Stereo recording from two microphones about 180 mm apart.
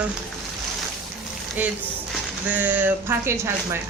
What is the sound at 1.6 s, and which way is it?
Speech, 10° right (ahead or behind).